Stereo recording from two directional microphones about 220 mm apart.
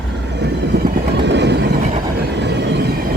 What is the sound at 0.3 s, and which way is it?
Train, 50° right (ahead or behind).